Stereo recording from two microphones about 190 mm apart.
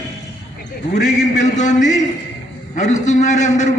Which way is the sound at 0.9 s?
35° left (ahead or behind).